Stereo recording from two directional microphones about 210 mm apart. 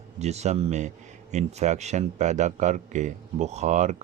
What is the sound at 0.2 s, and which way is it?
A man's voice, 30° right (ahead or behind).